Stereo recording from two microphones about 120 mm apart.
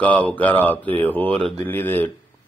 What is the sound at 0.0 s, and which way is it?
A man's voice, 15° left (ahead or behind).